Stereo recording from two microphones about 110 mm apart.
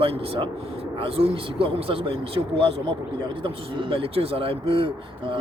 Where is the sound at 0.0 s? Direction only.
55° right (ahead or behind).